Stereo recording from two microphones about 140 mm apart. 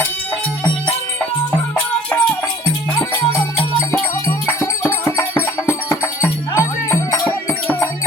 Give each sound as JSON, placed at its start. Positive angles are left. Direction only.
{"t": 1.7, "sound": "music", "side_deg": 10}
{"t": 4.3, "sound": "music", "side_deg": 20}
{"t": 6.2, "sound": "music", "side_deg": 20}